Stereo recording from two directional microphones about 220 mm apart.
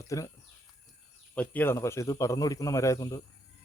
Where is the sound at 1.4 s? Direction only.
10° left (ahead or behind).